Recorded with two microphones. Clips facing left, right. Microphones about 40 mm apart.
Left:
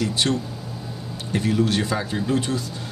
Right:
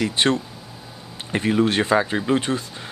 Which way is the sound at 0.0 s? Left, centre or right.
Right.